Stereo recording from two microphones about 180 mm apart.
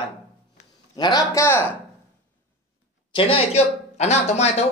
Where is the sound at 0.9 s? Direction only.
20° left (ahead or behind).